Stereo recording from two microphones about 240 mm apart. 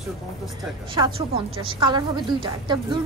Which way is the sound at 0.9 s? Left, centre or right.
Centre.